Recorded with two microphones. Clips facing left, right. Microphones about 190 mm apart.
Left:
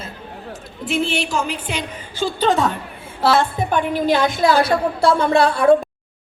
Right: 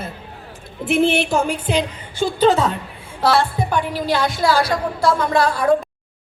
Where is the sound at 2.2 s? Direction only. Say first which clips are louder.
Right 2 dB; 10° right (ahead or behind).